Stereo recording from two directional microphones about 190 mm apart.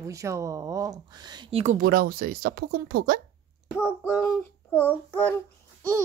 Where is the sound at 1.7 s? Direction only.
50° right (ahead or behind).